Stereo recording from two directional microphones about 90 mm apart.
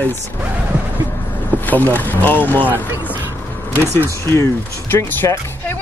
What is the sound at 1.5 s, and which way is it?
Speech, 20° left (ahead or behind).